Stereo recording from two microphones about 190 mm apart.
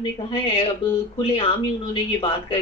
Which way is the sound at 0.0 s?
30° left (ahead or behind).